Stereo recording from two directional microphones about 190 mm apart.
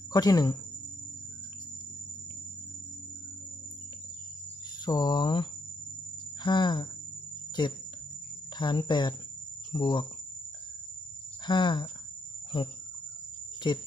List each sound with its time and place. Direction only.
0.1 s speech: 20° left (ahead or behind)
4.9 s speech: 20° left (ahead or behind)
11.4 s speech: 25° left (ahead or behind)
13.7 s speech: 25° left (ahead or behind)